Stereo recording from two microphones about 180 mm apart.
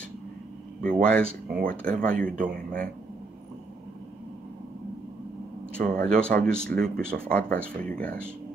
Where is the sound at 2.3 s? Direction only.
50° right (ahead or behind).